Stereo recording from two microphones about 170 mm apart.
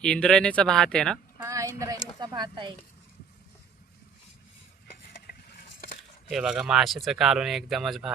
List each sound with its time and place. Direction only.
0.0 s speech: 5° left (ahead or behind)
1.4 s speech: 20° right (ahead or behind)
5.2 s vehicle: 60° left (ahead or behind)
6.3 s speech: 5° right (ahead or behind)